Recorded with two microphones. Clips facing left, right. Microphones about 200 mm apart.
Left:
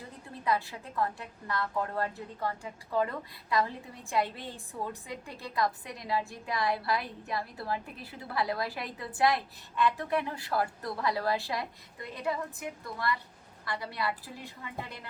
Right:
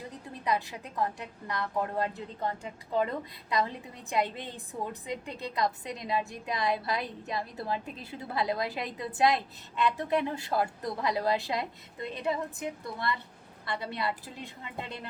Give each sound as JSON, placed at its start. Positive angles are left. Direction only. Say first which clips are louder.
{"t": 0.4, "sound": "a woman's voice", "louder": "even", "side_deg": -20}